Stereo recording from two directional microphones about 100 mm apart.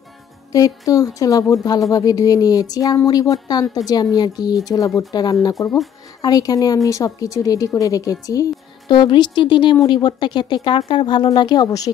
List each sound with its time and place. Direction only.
0.5 s speech: 35° left (ahead or behind)
8.8 s speech: 50° left (ahead or behind)